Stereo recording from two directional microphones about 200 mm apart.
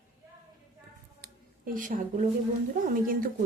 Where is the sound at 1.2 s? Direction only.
45° right (ahead or behind).